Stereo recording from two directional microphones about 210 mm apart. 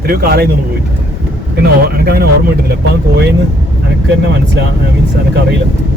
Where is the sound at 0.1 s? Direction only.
45° right (ahead or behind).